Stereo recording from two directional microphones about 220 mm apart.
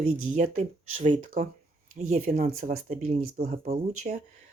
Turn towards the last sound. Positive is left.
turn(degrees=-35)  # may be behind; listen again after turning